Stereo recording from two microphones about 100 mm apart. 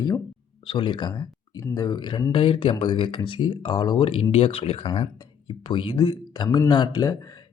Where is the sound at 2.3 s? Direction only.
60° left (ahead or behind).